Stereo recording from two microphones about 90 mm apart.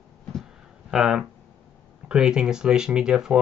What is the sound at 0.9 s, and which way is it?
Speech, 5° right (ahead or behind).